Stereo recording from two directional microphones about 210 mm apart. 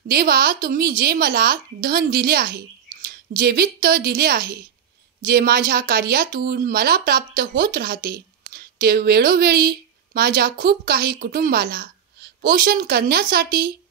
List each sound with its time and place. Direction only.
0.1 s speech: 45° right (ahead or behind)